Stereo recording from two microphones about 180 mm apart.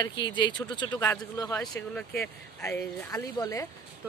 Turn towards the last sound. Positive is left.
turn(degrees=20)  # may be behind; listen again after turning